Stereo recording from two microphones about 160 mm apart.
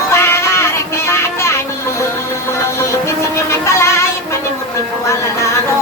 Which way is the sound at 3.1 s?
15° left (ahead or behind).